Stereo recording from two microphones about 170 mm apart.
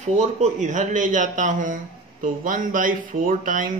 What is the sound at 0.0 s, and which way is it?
Speech, 45° right (ahead or behind).